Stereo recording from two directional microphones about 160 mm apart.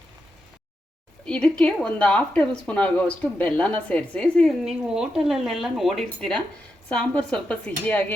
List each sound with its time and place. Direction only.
1.2 s speech: 5° left (ahead or behind)